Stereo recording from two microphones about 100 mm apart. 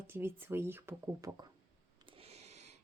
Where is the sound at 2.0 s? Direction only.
75° right (ahead or behind).